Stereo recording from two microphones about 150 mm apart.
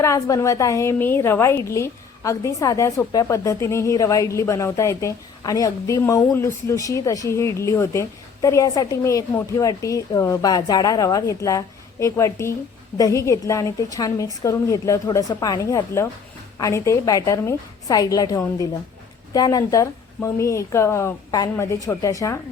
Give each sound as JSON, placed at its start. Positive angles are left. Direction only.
{"t": 0.0, "sound": "a woman's voice", "side_deg": 20}